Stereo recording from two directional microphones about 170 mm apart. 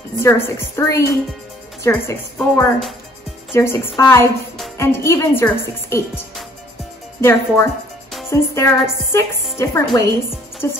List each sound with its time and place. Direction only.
0.2 s a woman's voice: 15° left (ahead or behind)
2.3 s a woman's voice: 5° left (ahead or behind)
3.5 s a woman's voice: 15° left (ahead or behind)
7.2 s a woman's voice: 15° left (ahead or behind)